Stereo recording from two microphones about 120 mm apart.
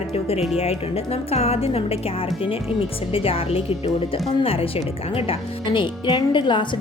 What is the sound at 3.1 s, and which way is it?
A woman's voice, 50° left (ahead or behind).